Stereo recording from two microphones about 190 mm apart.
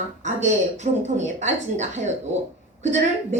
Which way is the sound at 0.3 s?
40° right (ahead or behind).